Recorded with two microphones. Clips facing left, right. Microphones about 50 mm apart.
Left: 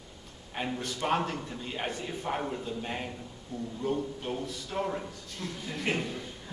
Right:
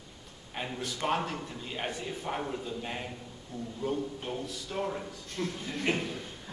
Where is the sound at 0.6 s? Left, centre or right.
Centre.